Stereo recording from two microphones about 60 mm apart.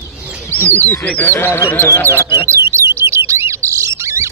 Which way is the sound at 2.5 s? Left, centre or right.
Right.